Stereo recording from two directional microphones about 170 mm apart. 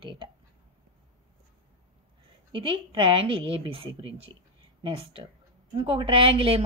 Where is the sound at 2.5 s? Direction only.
30° right (ahead or behind).